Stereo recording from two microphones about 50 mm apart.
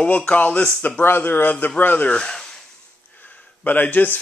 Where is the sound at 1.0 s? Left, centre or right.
Left.